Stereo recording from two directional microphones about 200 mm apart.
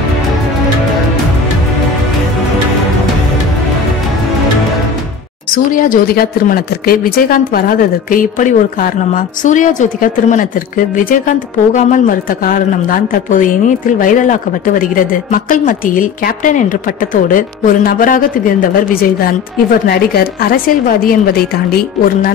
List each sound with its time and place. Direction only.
5.8 s a woman's voice: 45° left (ahead or behind)